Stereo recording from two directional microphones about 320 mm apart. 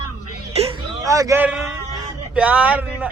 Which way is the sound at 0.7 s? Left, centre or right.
Centre.